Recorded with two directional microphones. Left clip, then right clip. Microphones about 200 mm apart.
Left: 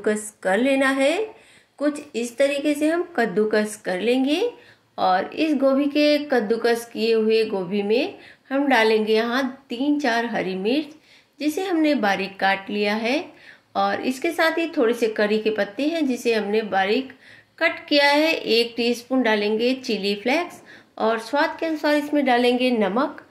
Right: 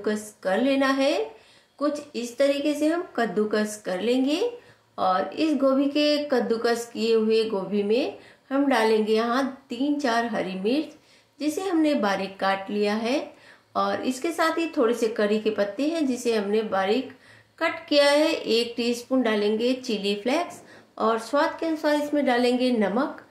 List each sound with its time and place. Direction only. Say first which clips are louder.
0.0 s a woman's voice: left 4 dB; 20° left (ahead or behind)
2.1 s speech: left 2 dB; 20° left (ahead or behind)